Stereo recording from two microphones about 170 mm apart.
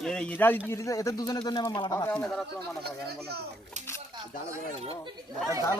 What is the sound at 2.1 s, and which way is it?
Speech, 5° left (ahead or behind).